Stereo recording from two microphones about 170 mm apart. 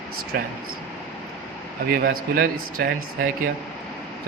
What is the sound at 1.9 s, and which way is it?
Speech, 60° right (ahead or behind).